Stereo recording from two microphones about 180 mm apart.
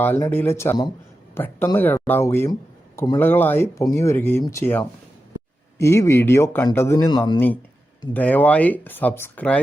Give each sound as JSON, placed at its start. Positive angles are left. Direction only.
{"t": 0.0, "sound": "speech", "side_deg": 10}